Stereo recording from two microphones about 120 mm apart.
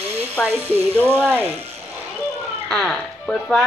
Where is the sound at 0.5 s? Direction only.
20° right (ahead or behind).